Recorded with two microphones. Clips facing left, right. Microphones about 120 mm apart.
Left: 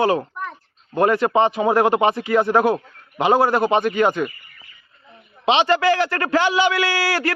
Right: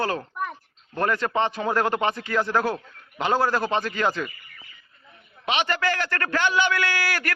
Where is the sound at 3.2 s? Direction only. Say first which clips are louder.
Left 6 dB; 25° left (ahead or behind).